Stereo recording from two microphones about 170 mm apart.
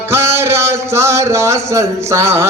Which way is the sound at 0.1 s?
15° right (ahead or behind).